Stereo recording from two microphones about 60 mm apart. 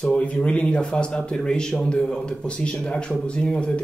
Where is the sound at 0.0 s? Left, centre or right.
Left.